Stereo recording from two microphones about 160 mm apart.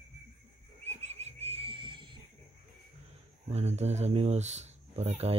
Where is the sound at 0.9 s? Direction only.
45° right (ahead or behind).